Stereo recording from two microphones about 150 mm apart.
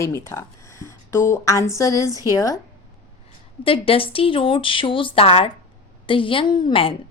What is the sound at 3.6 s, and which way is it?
A woman's voice, 40° left (ahead or behind).